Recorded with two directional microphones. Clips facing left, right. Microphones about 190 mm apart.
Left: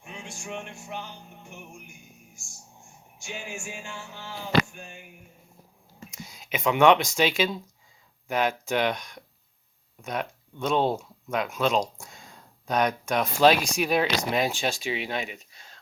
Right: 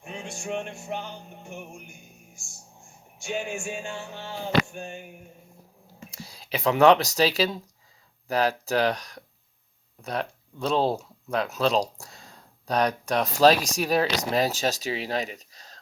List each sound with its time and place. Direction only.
0.0 s music: 35° right (ahead or behind)
0.4 s speech: 35° right (ahead or behind)
3.2 s music: 55° right (ahead or behind)
4.2 s speech: 30° right (ahead or behind)
6.1 s speech: 35° right (ahead or behind)